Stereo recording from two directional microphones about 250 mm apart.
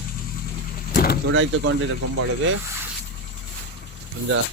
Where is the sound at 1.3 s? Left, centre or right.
Right.